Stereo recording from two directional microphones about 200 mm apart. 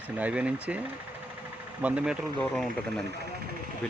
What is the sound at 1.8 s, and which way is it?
Speech, 5° right (ahead or behind).